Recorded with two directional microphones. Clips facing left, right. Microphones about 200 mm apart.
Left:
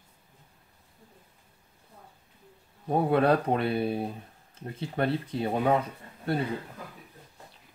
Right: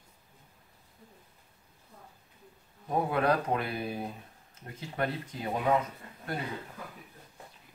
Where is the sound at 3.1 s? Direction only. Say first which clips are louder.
Left 5 dB; 30° left (ahead or behind).